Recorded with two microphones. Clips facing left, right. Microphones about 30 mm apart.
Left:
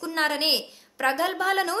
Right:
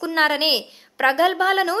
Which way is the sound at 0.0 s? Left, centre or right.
Right.